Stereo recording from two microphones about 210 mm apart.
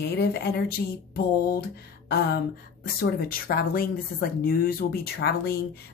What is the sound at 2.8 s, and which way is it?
Speech, 45° left (ahead or behind).